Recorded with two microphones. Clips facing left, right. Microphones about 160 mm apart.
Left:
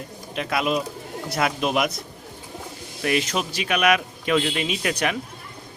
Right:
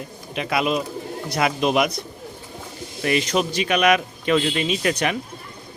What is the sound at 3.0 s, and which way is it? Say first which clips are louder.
Speech: right 3 dB; 5° left (ahead or behind).